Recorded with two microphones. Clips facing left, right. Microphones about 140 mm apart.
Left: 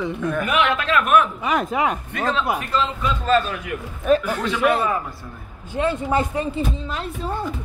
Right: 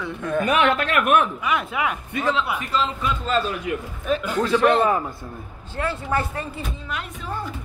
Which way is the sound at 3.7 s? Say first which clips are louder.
Right 3 dB; 25° right (ahead or behind).